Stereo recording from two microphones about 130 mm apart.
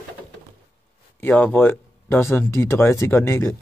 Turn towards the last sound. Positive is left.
turn(degrees=20)  # may be behind; listen again after turning